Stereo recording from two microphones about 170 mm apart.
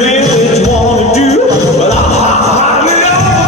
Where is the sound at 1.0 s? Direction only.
40° left (ahead or behind).